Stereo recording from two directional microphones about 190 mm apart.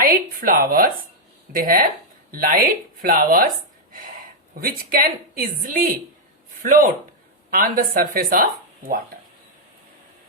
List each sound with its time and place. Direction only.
0.0 s speech: 50° right (ahead or behind)
4.6 s speech: 50° right (ahead or behind)